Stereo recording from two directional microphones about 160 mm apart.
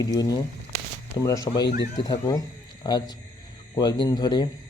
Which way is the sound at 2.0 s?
25° left (ahead or behind).